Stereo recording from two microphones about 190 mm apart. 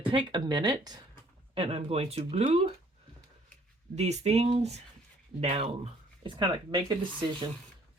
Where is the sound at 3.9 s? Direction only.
35° right (ahead or behind).